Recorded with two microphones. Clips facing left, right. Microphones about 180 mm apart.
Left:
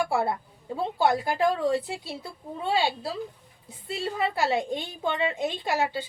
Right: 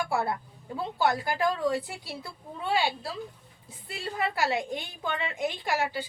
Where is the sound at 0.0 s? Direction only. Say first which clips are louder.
Left 3 dB; 25° left (ahead or behind).